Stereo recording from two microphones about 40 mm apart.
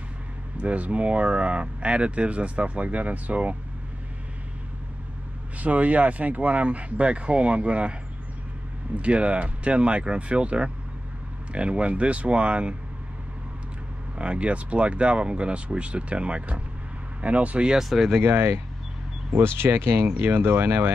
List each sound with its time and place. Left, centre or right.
0.6 s speech: right
5.6 s speech: right
8.9 s speech: right
14.1 s speech: right
17.6 s speech: centre
18.2 s speech: right
19.3 s speech: right